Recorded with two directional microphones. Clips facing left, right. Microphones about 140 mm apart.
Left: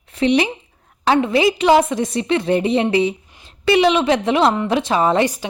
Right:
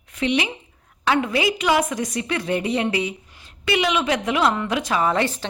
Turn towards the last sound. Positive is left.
turn(degrees=15)  # may be behind; listen again after turning